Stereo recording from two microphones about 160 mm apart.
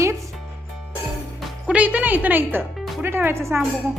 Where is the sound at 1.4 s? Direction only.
10° right (ahead or behind).